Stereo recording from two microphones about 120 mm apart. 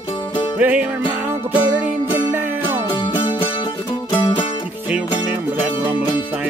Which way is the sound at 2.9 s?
50° left (ahead or behind).